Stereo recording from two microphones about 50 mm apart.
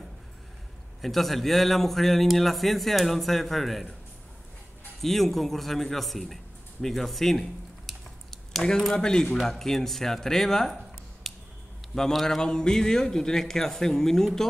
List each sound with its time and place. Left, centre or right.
1.0 s a man's voice: centre
5.0 s a man's voice: centre
8.6 s speech: centre
11.3 s a sound: centre
11.9 s a man's voice: centre